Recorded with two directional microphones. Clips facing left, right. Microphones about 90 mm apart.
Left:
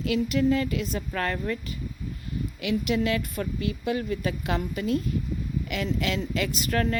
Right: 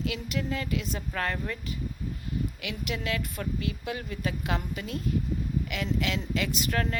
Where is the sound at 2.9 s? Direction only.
5° left (ahead or behind).